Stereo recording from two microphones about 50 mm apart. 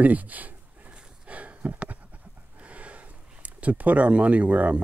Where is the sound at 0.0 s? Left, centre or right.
Right.